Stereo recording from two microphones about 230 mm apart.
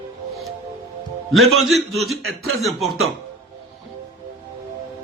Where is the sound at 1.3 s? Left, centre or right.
Centre.